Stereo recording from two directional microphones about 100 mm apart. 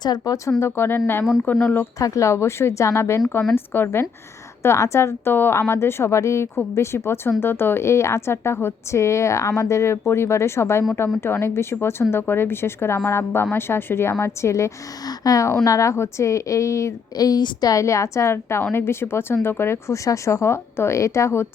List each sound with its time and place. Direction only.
0.0 s speech: 45° left (ahead or behind)
0.6 s a woman's voice: 25° left (ahead or behind)